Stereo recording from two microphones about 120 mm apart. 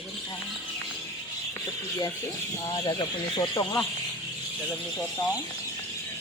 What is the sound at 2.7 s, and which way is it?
Speech, 35° left (ahead or behind).